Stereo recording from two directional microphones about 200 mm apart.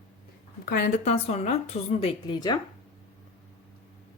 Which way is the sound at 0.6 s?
50° left (ahead or behind).